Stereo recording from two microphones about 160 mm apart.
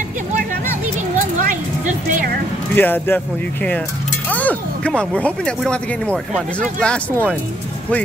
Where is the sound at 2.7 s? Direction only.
10° left (ahead or behind).